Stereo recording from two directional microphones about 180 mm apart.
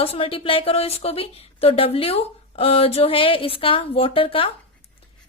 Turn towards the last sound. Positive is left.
turn(degrees=30)  # may be behind; listen again after turning